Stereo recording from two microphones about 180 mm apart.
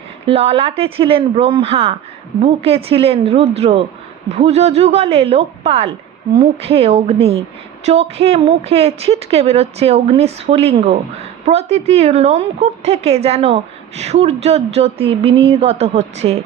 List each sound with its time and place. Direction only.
0.3 s a woman's voice: 35° right (ahead or behind)